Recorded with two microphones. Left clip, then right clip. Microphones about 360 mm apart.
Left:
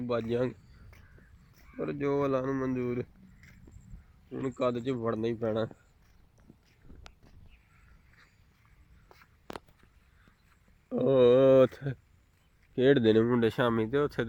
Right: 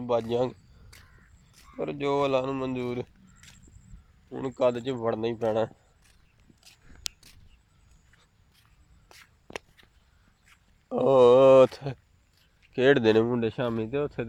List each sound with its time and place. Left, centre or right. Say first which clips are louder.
0.3 s speech: right 4 dB; centre
1.7 s speech: right 3 dB; centre
4.3 s speech: right 5 dB; centre
6.7 s a sound: right 18 dB; right
9.5 s a sound: right 4 dB; left
10.9 s speech: right 5 dB; centre
12.7 s speech: right 3 dB; centre
13.3 s speech: left 1 dB; centre